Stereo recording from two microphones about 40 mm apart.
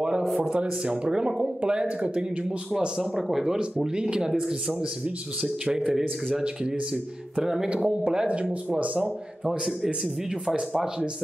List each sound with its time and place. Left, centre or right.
0.5 s speech: right
3.0 s speech: centre
3.8 s speech: centre
7.4 s speech: centre
7.7 s speech: right